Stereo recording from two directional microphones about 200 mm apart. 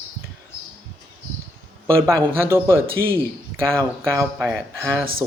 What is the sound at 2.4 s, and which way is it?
Speech, 10° right (ahead or behind).